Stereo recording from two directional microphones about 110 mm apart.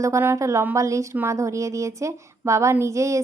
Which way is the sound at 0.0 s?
25° right (ahead or behind).